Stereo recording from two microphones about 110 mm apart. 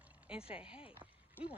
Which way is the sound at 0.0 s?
10° right (ahead or behind).